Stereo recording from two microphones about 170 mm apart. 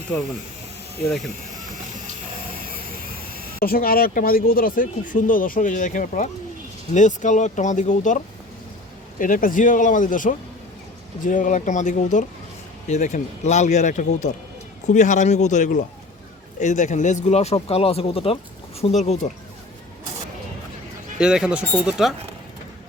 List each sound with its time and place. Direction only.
3.6 s speech: 60° left (ahead or behind); by 19.1 s 40° left (ahead or behind)
21.2 s speech: 5° right (ahead or behind)